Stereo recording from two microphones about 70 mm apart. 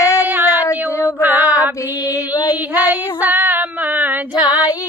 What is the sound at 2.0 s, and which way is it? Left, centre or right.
Music, left.